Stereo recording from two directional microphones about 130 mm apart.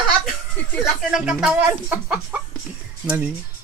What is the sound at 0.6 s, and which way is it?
Speech, 10° left (ahead or behind).